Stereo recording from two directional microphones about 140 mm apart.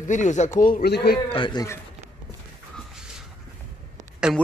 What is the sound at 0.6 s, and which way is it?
Speech, 75° left (ahead or behind).